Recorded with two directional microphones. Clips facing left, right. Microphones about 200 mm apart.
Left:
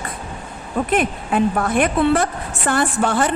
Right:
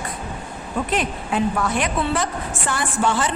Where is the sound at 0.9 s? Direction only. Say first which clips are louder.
Left 5 dB; 55° left (ahead or behind).